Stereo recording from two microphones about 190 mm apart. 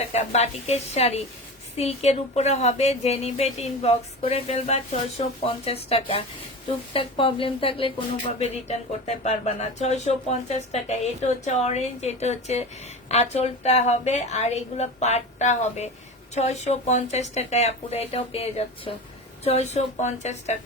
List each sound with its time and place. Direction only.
0.1 s speech: 35° left (ahead or behind)